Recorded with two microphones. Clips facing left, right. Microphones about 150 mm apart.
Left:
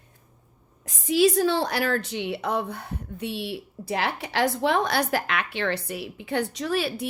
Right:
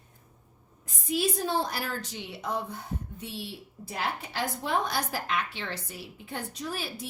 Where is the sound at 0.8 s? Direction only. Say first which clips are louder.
Left 9 dB; 90° left.